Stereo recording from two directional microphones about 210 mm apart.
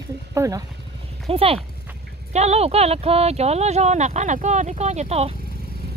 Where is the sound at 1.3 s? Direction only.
25° right (ahead or behind).